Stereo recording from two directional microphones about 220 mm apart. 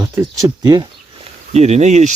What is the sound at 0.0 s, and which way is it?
Speech, 15° right (ahead or behind).